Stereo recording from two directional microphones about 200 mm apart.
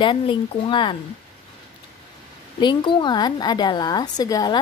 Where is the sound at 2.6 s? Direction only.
25° left (ahead or behind).